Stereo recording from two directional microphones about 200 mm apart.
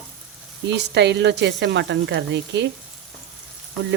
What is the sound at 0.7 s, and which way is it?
Speech, 60° right (ahead or behind).